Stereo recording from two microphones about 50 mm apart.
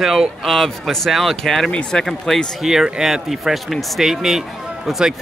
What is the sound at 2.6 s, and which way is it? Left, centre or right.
Speech, centre.